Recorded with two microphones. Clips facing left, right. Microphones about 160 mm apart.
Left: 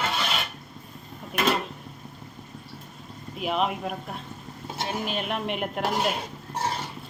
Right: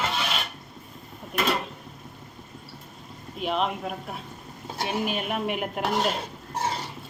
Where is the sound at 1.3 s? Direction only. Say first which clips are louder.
Left 2 dB; centre (ahead or behind).